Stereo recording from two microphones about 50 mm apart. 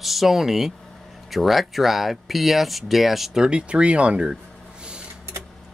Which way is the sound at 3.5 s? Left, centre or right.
Right.